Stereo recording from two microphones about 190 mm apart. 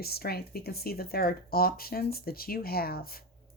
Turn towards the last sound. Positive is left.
turn(degrees=50)  # may be behind; listen again after turning